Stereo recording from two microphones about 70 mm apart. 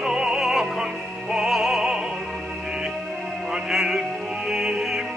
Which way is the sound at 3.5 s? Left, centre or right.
Centre.